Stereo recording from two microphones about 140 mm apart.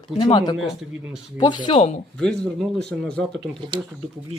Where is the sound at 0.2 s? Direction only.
35° left (ahead or behind).